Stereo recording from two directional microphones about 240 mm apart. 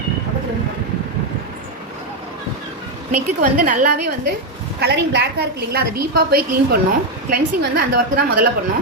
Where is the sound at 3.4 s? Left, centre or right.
Right.